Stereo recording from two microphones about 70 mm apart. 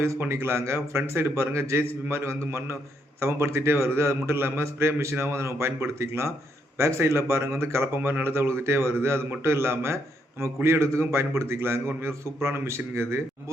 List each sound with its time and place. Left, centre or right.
0.0 s speech: right